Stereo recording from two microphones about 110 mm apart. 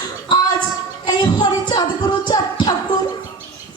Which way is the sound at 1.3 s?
40° left (ahead or behind).